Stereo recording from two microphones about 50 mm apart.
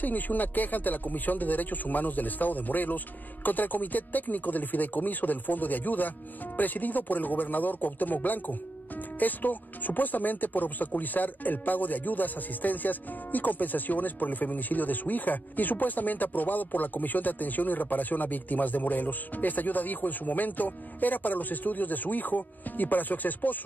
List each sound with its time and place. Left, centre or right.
0.0 s music: left